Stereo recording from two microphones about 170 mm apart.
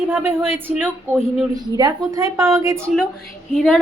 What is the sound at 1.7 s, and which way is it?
A woman's voice, 20° right (ahead or behind).